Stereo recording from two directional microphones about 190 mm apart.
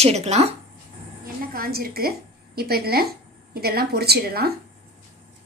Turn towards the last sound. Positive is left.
turn(degrees=-55)  # may be behind; listen again after turning